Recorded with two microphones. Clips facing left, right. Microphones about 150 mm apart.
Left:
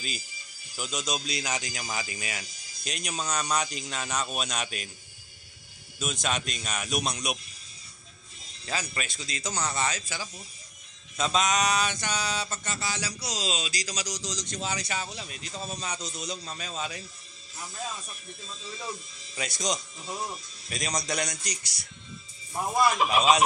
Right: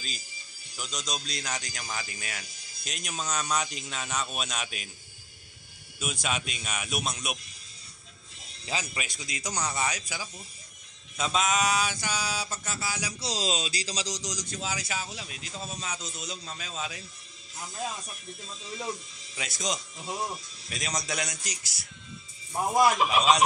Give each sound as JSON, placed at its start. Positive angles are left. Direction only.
{"t": 0.7, "sound": "speech", "side_deg": 5}
{"t": 5.9, "sound": "speech", "side_deg": -10}
{"t": 8.8, "sound": "mantra", "side_deg": -10}
{"t": 13.2, "sound": "speech", "side_deg": -35}
{"t": 14.3, "sound": "speech", "side_deg": -5}
{"t": 19.3, "sound": "speech", "side_deg": 0}
{"t": 22.9, "sound": "speech", "side_deg": 0}